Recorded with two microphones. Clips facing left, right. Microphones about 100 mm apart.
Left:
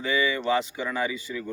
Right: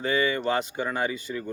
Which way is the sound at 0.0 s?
45° right (ahead or behind).